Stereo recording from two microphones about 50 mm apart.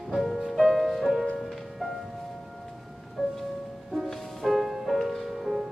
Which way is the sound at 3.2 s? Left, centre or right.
Centre.